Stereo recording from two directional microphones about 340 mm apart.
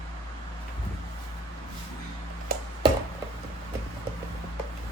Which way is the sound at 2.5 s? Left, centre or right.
Right.